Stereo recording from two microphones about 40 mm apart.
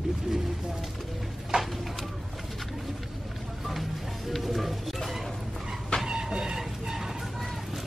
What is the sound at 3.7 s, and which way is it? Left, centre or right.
Music, centre.